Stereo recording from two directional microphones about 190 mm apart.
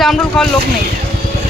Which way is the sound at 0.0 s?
Centre (ahead or behind).